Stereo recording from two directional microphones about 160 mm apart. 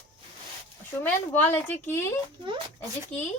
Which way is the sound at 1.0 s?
10° left (ahead or behind).